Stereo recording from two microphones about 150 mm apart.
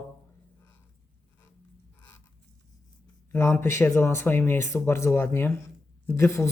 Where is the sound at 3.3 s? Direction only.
15° left (ahead or behind).